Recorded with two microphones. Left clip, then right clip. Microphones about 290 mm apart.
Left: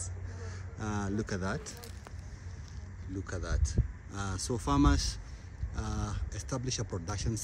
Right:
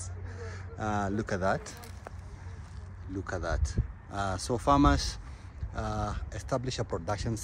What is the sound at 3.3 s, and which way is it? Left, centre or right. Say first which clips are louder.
Speech: right 8 dB; centre.